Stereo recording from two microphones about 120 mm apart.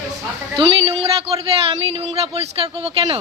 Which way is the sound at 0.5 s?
55° right (ahead or behind).